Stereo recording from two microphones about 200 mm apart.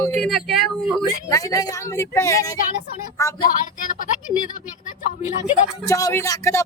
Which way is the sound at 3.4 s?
45° left (ahead or behind).